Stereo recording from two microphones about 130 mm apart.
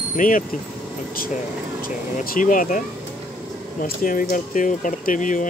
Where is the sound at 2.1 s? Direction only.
85° left.